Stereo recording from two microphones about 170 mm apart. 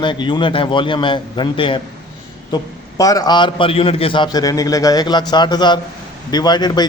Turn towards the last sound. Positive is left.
turn(degrees=25)  # may be behind; listen again after turning